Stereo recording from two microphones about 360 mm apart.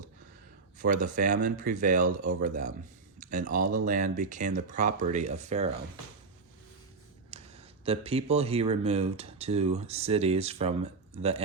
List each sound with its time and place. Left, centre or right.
0.8 s speech: right
7.3 s speech: centre